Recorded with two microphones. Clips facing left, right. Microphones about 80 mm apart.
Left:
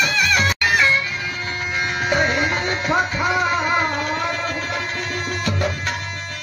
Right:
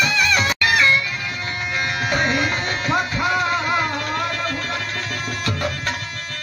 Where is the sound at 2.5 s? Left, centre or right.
Left.